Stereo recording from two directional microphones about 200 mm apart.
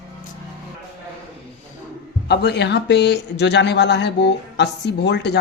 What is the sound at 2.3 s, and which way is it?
Speech, 55° left (ahead or behind).